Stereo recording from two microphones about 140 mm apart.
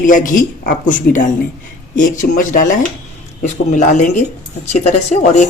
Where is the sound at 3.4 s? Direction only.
55° left (ahead or behind).